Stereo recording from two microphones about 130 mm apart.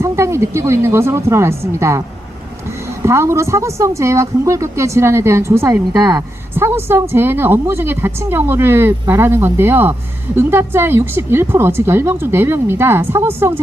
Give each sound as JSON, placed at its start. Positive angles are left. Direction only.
{"t": 0.0, "sound": "a woman's voice", "side_deg": -20}
{"t": 3.0, "sound": "speech", "side_deg": -20}
{"t": 6.5, "sound": "a woman's voice", "side_deg": -20}